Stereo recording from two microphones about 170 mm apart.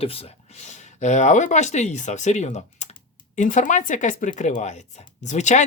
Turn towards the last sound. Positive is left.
turn(degrees=45)  # may be behind; listen again after turning